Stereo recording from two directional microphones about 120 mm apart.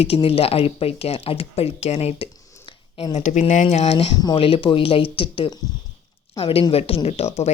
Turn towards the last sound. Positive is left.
turn(degrees=65)  # may be behind; listen again after turning